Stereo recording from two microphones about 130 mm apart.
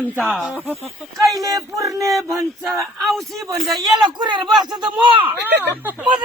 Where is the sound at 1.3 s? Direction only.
25° right (ahead or behind).